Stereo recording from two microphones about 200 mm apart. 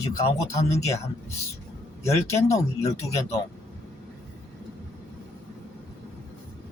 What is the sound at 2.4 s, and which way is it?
Speech, 15° left (ahead or behind).